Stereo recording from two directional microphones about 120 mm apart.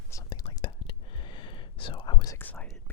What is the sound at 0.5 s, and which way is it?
Whispering, 40° left (ahead or behind).